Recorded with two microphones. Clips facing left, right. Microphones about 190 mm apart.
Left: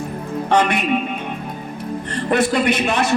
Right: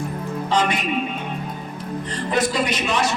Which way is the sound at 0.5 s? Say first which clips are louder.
Left 4 dB; 65° left (ahead or behind).